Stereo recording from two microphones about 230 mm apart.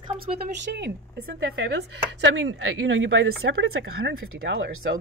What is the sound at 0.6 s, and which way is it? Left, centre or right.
A woman's voice, right.